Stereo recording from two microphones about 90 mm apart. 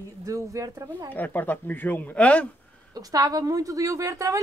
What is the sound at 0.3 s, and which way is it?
Speech, 40° right (ahead or behind).